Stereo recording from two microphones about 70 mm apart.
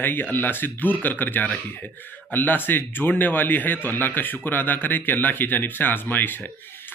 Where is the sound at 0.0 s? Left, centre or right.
Left.